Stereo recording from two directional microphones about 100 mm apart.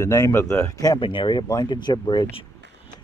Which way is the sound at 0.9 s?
55° left (ahead or behind).